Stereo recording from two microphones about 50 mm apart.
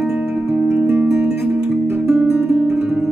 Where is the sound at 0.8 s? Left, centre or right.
Right.